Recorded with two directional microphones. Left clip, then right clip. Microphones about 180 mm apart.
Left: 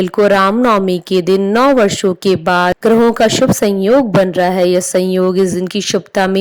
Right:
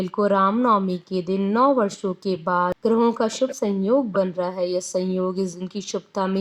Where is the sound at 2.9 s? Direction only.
20° left (ahead or behind).